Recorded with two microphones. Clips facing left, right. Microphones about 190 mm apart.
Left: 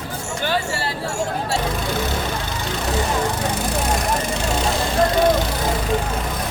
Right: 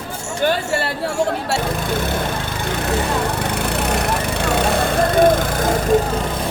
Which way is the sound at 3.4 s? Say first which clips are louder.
Right 1 dB; 65° right (ahead or behind).